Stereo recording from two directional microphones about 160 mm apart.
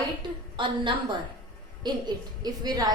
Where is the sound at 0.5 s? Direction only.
30° right (ahead or behind).